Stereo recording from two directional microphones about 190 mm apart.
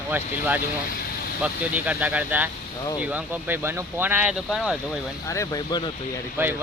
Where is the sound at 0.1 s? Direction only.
10° right (ahead or behind).